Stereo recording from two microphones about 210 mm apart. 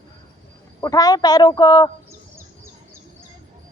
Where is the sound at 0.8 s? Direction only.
15° left (ahead or behind).